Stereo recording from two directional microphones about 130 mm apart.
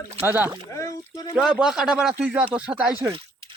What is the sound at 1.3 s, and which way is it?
Speech, 5° right (ahead or behind).